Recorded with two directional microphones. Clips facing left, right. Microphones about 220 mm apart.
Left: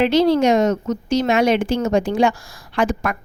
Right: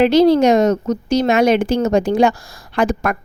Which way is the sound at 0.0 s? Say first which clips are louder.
Right 4 dB; 40° right (ahead or behind).